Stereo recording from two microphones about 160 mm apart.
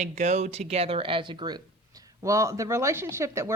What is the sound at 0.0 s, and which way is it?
Speech, 45° right (ahead or behind).